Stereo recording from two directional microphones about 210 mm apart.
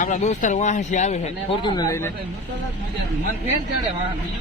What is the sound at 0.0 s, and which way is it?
Speech, 35° left (ahead or behind).